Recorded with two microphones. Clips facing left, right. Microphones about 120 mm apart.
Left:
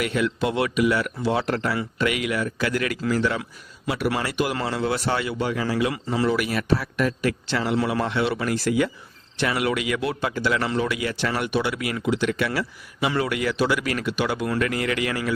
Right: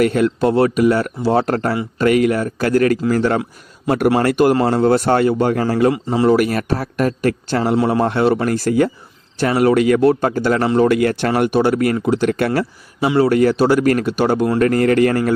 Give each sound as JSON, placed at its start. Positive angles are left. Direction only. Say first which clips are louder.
{"t": 0.0, "sound": "speech", "louder": "right 9 dB", "side_deg": -45}
{"t": 5.9, "sound": "speech", "louder": "right 7 dB", "side_deg": -25}
{"t": 6.2, "sound": "speech", "louder": "right 9 dB", "side_deg": -45}